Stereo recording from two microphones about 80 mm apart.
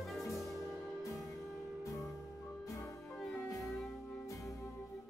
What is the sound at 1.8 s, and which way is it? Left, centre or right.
Music, left.